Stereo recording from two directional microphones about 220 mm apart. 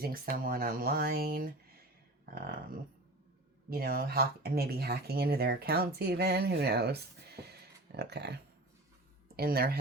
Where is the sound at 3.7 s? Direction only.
40° right (ahead or behind).